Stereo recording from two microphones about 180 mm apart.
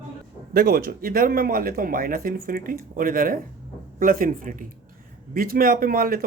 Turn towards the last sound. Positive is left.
turn(degrees=-55)  # may be behind; listen again after turning